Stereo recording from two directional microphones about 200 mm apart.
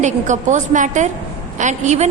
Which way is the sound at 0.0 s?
35° right (ahead or behind).